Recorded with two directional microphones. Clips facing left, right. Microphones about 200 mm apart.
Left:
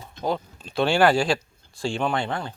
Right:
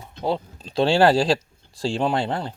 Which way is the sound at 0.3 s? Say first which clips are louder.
Right 2 dB; 30° right (ahead or behind).